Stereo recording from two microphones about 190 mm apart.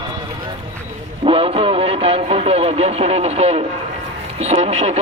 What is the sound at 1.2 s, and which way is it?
Speech, 30° right (ahead or behind).